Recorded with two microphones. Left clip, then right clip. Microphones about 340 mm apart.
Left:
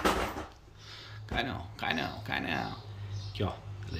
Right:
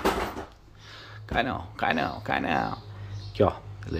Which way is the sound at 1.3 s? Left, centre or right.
Centre.